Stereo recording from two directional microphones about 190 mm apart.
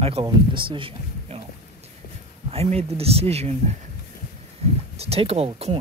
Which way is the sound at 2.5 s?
35° right (ahead or behind).